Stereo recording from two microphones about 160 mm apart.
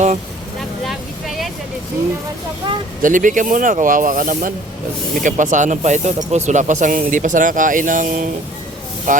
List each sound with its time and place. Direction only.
3.0 s speech: 55° right (ahead or behind)